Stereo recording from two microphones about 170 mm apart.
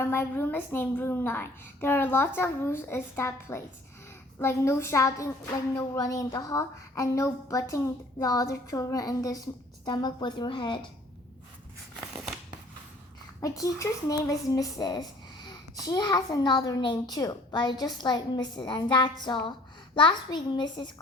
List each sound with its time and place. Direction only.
0.0 s a woman's voice: 15° left (ahead or behind)
13.4 s speech: 20° left (ahead or behind)